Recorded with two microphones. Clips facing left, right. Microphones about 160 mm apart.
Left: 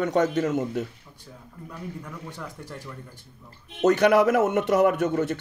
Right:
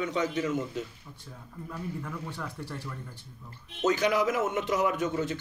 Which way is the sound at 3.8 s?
60° left (ahead or behind).